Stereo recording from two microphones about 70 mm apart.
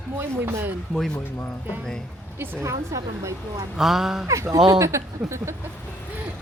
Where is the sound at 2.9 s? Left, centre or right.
Right.